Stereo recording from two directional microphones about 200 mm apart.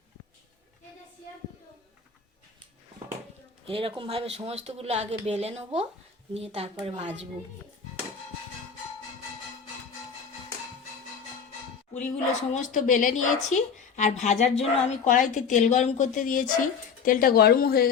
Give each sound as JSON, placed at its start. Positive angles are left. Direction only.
{"t": 3.7, "sound": "a woman's voice", "side_deg": -25}
{"t": 12.0, "sound": "a woman's voice", "side_deg": 40}